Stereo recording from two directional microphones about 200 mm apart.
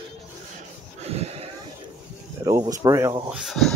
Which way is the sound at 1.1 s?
30° right (ahead or behind).